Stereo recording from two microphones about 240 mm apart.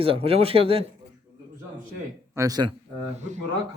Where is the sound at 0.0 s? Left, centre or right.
Right.